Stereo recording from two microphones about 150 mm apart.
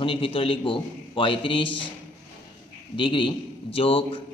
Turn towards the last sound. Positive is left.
turn(degrees=40)  # may be behind; listen again after turning